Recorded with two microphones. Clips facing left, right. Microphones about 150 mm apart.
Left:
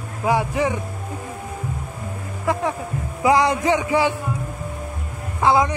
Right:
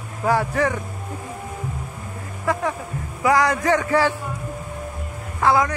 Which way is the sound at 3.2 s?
25° left (ahead or behind).